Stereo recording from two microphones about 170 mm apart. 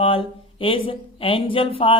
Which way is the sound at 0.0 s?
30° left (ahead or behind).